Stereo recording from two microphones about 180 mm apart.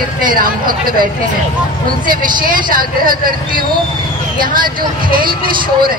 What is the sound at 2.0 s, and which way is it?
Speech, 50° right (ahead or behind).